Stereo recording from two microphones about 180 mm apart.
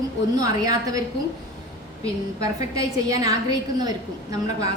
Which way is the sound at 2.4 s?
20° right (ahead or behind).